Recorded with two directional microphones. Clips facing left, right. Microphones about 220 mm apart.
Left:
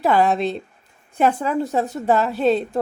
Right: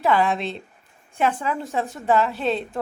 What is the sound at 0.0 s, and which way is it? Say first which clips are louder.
A woman's voice: left 3 dB; 40° left (ahead or behind).